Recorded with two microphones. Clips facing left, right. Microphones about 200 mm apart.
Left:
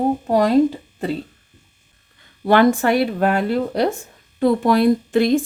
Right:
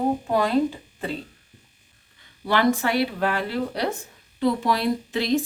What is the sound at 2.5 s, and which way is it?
Speech, 50° left (ahead or behind).